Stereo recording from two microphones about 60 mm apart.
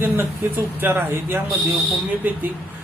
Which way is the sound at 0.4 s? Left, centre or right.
Right.